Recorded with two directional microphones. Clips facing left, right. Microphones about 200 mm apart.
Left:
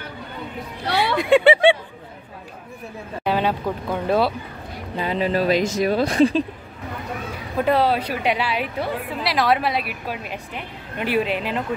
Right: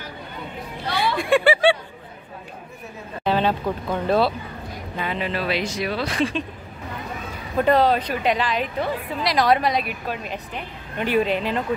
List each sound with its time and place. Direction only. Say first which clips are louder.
0.8 s a sound: left 2 dB; 70° left (ahead or behind)
1.1 s speech: left 4 dB; 20° left (ahead or behind)
3.3 s a woman's voice: right 1 dB; 10° left (ahead or behind)
4.9 s speech: left 5 dB; 35° left (ahead or behind)
7.5 s a woman's voice: right 1 dB; 5° left (ahead or behind)